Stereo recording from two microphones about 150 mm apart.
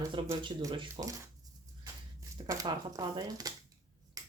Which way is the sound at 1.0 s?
35° right (ahead or behind).